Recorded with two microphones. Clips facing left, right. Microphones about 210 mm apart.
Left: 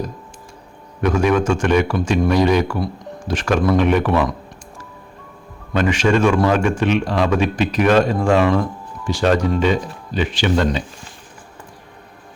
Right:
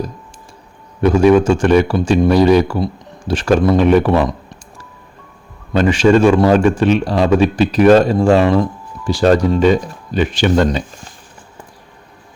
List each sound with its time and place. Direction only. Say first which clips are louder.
1.0 s a man's voice: right 6 dB; 30° right (ahead or behind)
2.0 s speech: right 5 dB; 25° right (ahead or behind)
2.3 s a man's voice: right 5 dB; 35° right (ahead or behind)
5.7 s a man's voice: right 5 dB; 30° right (ahead or behind)